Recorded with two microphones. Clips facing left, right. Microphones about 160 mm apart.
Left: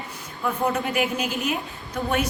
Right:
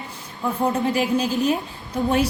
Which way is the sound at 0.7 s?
30° right (ahead or behind).